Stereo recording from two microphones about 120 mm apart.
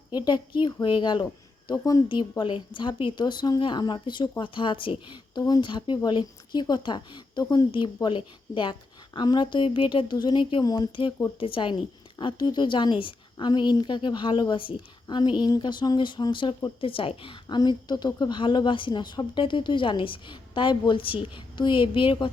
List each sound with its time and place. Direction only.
0.1 s a woman's voice: 40° left (ahead or behind)
2.4 s a woman's voice: 45° left (ahead or behind)
11.3 s a woman's voice: 45° left (ahead or behind)
17.6 s a woman's voice: 35° left (ahead or behind)